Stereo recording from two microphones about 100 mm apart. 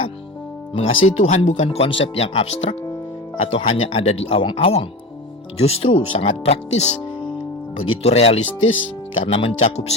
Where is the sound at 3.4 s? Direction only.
65° left (ahead or behind).